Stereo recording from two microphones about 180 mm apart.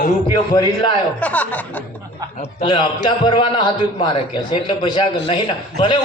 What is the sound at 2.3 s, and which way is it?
A man's voice, 30° left (ahead or behind).